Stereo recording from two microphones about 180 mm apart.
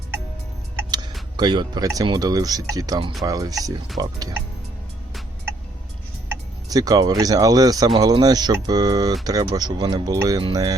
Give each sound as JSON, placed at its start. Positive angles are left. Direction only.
{"t": 1.4, "sound": "speech", "side_deg": -25}
{"t": 6.7, "sound": "speech", "side_deg": -20}